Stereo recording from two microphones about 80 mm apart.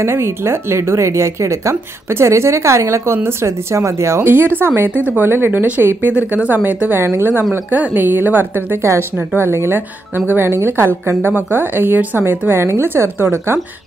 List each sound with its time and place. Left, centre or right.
0.0 s a woman's voice: right
8.8 s a woman's voice: right